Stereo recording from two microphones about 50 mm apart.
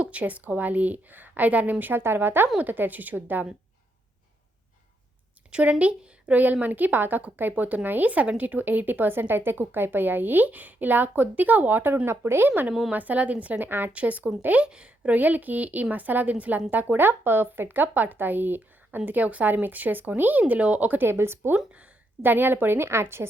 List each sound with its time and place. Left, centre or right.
0.0 s a woman's voice: right
5.5 s speech: right
5.8 s a sound: right
6.3 s a woman's voice: right
12.0 s speech: right
12.5 s a woman's voice: right
13.7 s a woman's voice: right
13.9 s a woman's voice: right
14.7 s a woman's voice: centre
15.1 s a woman's voice: right
21.0 s speech: right
21.5 s speech: right
22.2 s a woman's voice: right